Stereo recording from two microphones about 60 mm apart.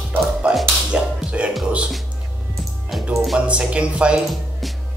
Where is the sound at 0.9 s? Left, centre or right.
Centre.